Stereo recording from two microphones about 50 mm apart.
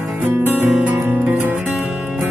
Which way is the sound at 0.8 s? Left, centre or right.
Right.